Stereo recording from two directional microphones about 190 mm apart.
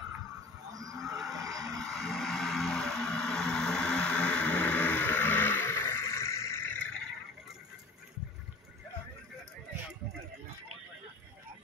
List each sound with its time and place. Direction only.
0.7 s vehicle: 15° right (ahead or behind)
1.0 s vehicle: centre (ahead or behind)